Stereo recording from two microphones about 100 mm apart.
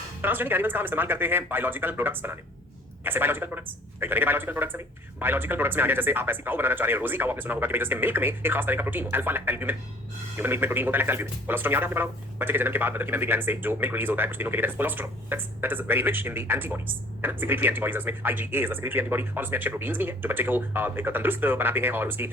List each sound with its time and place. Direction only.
0.2 s speech: 20° right (ahead or behind)